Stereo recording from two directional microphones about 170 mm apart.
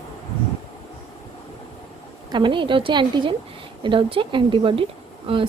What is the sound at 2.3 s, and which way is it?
A woman's voice, 30° right (ahead or behind).